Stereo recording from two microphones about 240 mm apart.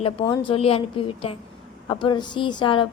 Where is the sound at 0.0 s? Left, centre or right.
Centre.